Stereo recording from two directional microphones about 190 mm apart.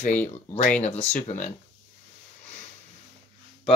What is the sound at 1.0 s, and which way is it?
Speech, 40° left (ahead or behind).